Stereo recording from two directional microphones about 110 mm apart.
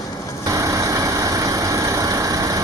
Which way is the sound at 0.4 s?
30° right (ahead or behind).